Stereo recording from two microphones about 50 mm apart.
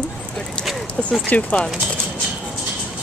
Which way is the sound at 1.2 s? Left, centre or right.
Left.